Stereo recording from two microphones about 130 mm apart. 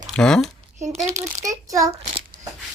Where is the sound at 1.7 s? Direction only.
25° right (ahead or behind).